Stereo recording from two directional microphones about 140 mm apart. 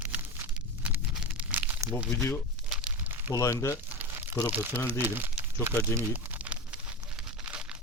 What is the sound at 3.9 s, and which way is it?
Crumpling, 15° right (ahead or behind).